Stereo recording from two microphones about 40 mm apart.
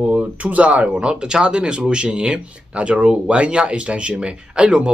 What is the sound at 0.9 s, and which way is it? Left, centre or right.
Speech, right.